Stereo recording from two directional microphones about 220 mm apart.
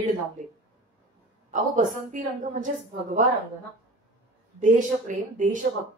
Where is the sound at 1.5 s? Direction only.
35° right (ahead or behind).